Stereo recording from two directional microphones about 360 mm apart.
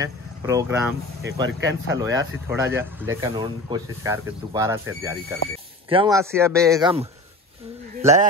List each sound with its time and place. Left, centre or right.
0.0 s speech: centre
1.4 s speech: right
2.0 s a man's voice: centre